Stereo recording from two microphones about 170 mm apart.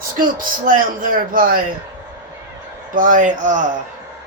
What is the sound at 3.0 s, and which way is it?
Speech, 50° right (ahead or behind).